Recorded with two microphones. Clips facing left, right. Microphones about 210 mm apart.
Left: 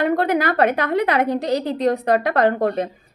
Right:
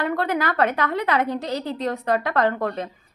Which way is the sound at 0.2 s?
15° left (ahead or behind).